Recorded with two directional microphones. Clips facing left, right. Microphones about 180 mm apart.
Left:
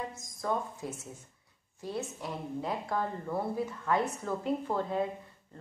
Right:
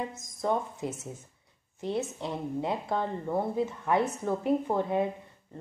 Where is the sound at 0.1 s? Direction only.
20° right (ahead or behind).